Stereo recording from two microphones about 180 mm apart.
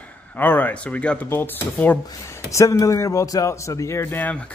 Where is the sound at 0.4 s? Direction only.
10° left (ahead or behind).